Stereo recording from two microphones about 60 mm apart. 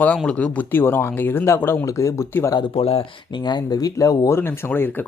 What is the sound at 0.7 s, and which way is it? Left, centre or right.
Speech, left.